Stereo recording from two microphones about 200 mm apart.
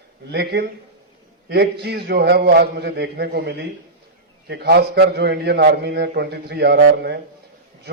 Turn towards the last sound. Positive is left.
turn(degrees=-55)  # may be behind; listen again after turning